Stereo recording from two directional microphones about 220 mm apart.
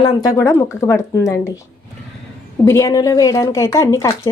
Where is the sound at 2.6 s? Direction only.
15° left (ahead or behind).